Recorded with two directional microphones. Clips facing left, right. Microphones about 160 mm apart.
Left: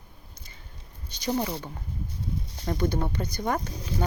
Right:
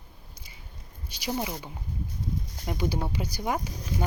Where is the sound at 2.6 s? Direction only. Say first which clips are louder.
Left 3 dB; 10° right (ahead or behind).